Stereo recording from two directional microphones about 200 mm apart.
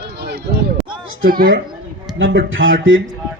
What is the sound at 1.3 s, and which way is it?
Speech, 45° right (ahead or behind).